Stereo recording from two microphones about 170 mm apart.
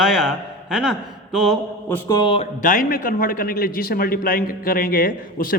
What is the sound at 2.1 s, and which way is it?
Speech, 30° left (ahead or behind).